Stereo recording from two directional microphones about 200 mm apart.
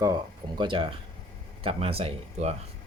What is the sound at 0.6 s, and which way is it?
Speech, 25° right (ahead or behind).